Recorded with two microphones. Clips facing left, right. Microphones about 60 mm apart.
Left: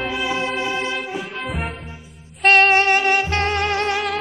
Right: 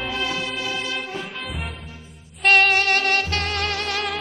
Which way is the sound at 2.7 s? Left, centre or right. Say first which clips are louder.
Left 4 dB; left.